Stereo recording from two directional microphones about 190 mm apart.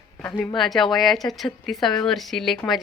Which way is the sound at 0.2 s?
5° left (ahead or behind).